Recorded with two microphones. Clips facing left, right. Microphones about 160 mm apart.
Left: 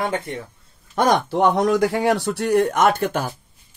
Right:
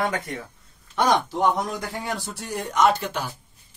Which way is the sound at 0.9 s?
60° left (ahead or behind).